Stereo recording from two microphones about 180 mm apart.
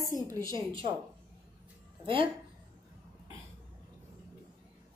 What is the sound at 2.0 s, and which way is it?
Speech, 30° right (ahead or behind).